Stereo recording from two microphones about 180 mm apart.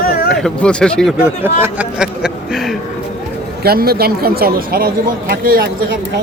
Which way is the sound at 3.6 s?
60° right (ahead or behind).